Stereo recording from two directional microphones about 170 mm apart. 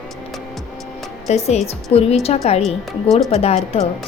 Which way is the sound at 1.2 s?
40° left (ahead or behind).